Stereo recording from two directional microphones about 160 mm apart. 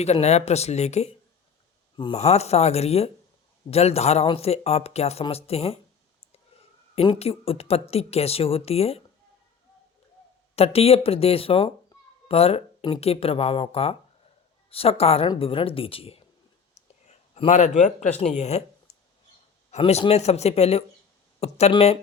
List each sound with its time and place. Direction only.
0.0 s speech: 45° left (ahead or behind)
2.1 s speech: 40° left (ahead or behind)
5.2 s a sound: 40° left (ahead or behind)
6.9 s speech: 35° left (ahead or behind)
10.5 s speech: 40° left (ahead or behind)
16.7 s a sound: 45° left (ahead or behind)
18.2 s speech: 45° left (ahead or behind)